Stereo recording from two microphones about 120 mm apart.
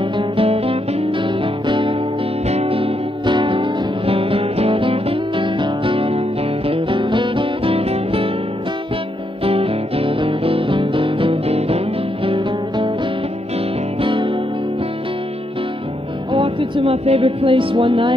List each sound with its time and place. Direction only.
0.0 s music: 50° right (ahead or behind)
2.4 s music: 60° right (ahead or behind)
9.4 s music: 55° right (ahead or behind)
14.0 s music: 45° right (ahead or behind)
16.3 s music: 50° right (ahead or behind)